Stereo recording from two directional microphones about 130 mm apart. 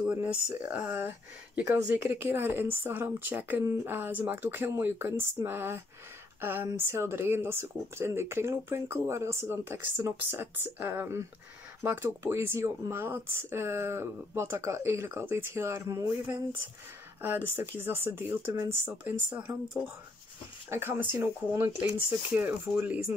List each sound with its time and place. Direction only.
0.0 s speech: 10° right (ahead or behind)
17.2 s speech: 15° right (ahead or behind)
20.7 s speech: 15° right (ahead or behind)